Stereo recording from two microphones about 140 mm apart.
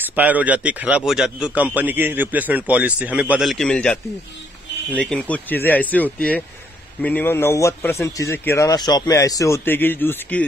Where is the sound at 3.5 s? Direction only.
5° left (ahead or behind).